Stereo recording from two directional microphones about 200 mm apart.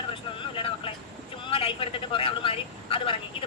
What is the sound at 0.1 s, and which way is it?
Vehicle, 25° left (ahead or behind).